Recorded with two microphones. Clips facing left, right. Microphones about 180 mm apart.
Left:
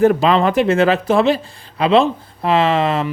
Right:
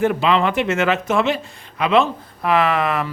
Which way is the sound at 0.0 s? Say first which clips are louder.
Left 4 dB; 40° left (ahead or behind).